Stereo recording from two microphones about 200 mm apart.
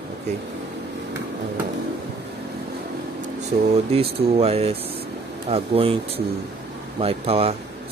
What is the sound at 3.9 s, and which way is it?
Speech, 30° right (ahead or behind).